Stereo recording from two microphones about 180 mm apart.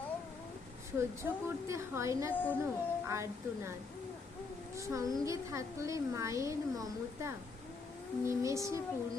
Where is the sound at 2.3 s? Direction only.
10° left (ahead or behind).